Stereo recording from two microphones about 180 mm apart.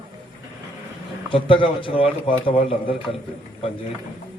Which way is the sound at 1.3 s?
30° left (ahead or behind).